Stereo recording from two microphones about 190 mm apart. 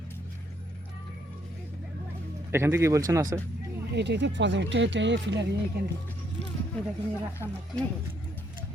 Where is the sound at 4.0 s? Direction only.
65° right (ahead or behind).